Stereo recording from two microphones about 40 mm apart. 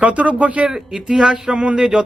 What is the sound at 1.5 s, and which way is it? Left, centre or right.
Speech, right.